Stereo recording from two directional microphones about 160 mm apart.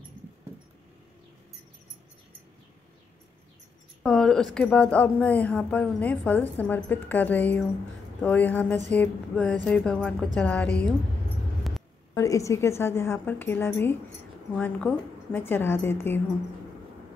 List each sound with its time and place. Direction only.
4.0 s a woman's voice: 5° left (ahead or behind)
11.7 s a sound: centre (ahead or behind)
12.1 s a woman's voice: 20° left (ahead or behind)